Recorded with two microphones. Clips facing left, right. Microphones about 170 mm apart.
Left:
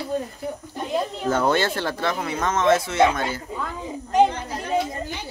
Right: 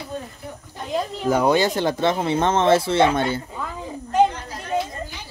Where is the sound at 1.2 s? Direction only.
10° right (ahead or behind).